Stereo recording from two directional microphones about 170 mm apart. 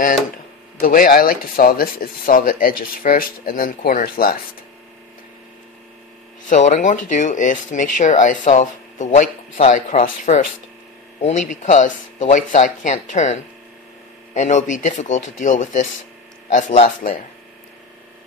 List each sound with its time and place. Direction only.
0.7 s speech: 55° left (ahead or behind)
6.5 s speech: 45° left (ahead or behind)